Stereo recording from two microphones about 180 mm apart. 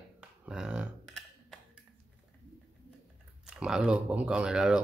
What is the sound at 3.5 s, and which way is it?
Speech, 5° right (ahead or behind).